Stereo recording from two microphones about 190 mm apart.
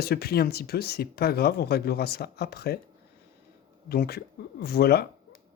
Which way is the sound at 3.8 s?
55° left (ahead or behind).